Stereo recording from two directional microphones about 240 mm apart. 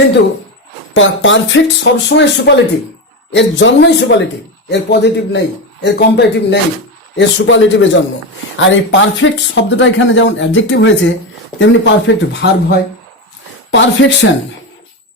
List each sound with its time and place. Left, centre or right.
0.9 s speech: left